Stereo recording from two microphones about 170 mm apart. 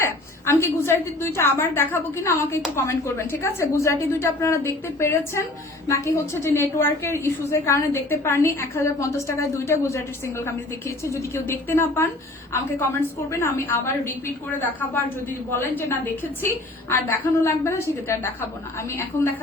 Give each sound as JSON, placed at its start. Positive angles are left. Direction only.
{"t": 0.0, "sound": "a woman's voice", "side_deg": 15}